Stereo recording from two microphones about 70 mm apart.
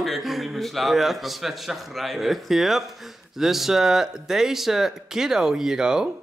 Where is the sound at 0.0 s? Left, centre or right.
Centre.